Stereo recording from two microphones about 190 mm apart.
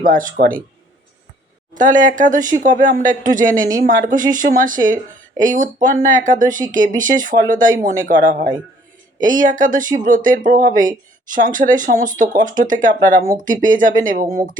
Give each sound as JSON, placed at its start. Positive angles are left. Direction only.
{"t": 0.0, "sound": "speech", "side_deg": -45}
{"t": 1.7, "sound": "speech", "side_deg": -45}